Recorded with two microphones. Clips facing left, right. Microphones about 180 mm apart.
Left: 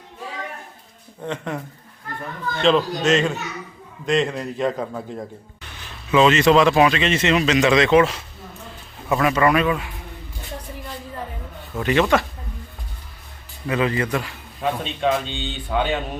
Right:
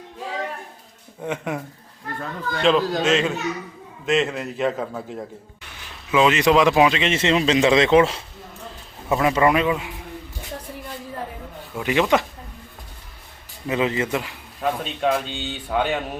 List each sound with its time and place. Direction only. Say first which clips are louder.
1.2 s a man's voice: right 1 dB; 10° right (ahead or behind)
6.1 s a man's voice: left 2 dB; 10° right (ahead or behind)
11.8 s speech: left 1 dB; 10° right (ahead or behind)
13.7 s a man's voice: left 1 dB; 20° right (ahead or behind)
14.6 s a man's voice: even; centre (ahead or behind)